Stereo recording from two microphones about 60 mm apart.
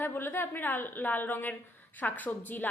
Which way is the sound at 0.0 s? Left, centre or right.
Left.